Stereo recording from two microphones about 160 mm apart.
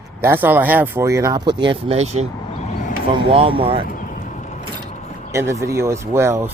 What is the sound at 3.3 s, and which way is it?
Speech, 35° right (ahead or behind).